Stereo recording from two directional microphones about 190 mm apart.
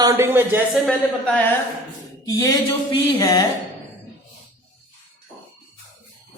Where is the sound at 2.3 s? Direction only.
20° left (ahead or behind).